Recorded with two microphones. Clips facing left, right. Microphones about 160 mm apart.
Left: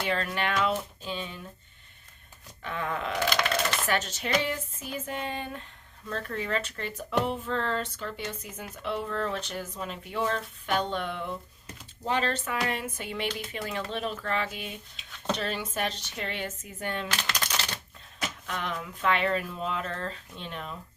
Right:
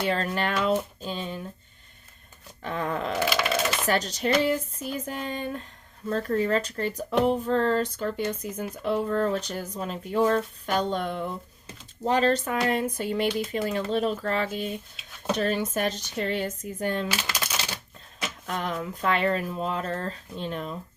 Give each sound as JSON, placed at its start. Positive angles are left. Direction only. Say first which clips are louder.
{"t": 0.0, "sound": "speech", "louder": "right 3 dB", "side_deg": -35}
{"t": 2.6, "sound": "speech", "louder": "right 3 dB", "side_deg": -35}
{"t": 3.2, "sound": "a sound", "louder": "right 1 dB", "side_deg": -5}
{"t": 3.8, "sound": "speech", "louder": "right 5 dB", "side_deg": -35}
{"t": 17.1, "sound": "a sound", "louder": "right 2 dB", "side_deg": -10}
{"t": 18.4, "sound": "speech", "louder": "right 6 dB", "side_deg": -40}